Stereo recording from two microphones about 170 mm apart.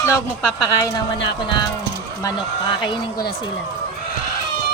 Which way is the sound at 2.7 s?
30° left (ahead or behind).